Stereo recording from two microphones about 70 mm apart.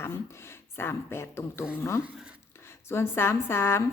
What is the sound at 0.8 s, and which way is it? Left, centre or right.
Speech, left.